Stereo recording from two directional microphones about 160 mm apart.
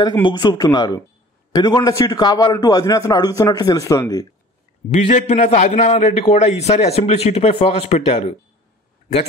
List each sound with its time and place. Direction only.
0.2 s a man's voice: 30° left (ahead or behind)
4.9 s a man's voice: 40° left (ahead or behind)